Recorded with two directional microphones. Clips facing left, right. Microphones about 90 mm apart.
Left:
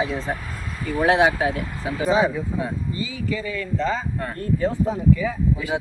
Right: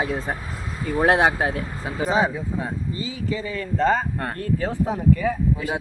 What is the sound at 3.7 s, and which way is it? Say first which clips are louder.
Speech: right 5 dB; 50° right (ahead or behind).